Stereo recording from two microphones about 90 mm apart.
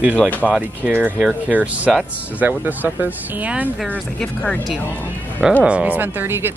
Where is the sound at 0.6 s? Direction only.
20° right (ahead or behind).